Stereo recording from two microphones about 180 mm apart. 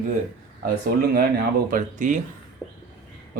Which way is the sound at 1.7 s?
45° right (ahead or behind).